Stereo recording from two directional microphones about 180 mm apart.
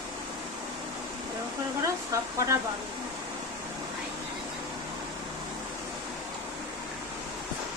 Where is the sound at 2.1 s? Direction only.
15° right (ahead or behind).